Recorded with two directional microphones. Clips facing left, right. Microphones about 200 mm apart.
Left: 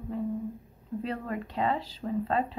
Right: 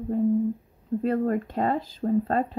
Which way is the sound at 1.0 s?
45° right (ahead or behind).